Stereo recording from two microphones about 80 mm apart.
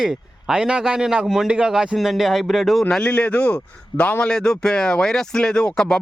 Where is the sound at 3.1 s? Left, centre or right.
Centre.